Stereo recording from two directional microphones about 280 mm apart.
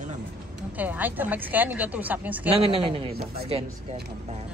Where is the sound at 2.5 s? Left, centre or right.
Centre.